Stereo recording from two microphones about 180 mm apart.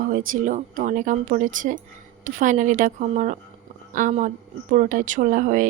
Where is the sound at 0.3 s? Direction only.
45° right (ahead or behind).